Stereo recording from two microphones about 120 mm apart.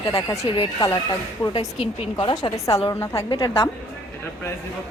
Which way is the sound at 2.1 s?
40° left (ahead or behind).